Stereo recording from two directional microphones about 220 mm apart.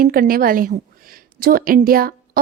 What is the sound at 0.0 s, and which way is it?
A woman's voice, 40° right (ahead or behind).